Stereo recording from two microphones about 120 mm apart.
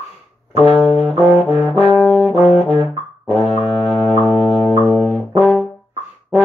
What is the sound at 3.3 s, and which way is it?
Music, 55° left (ahead or behind).